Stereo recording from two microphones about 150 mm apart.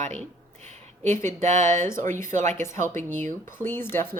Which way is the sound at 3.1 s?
55° right (ahead or behind).